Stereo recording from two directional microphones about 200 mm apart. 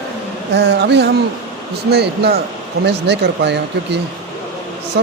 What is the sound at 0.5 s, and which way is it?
Speech, 55° right (ahead or behind).